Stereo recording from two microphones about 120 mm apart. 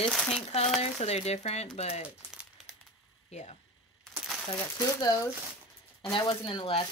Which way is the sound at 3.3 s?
65° left (ahead or behind).